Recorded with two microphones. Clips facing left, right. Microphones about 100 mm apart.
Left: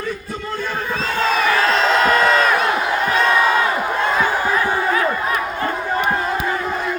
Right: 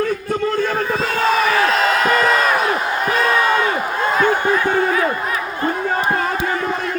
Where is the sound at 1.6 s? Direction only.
5° right (ahead or behind).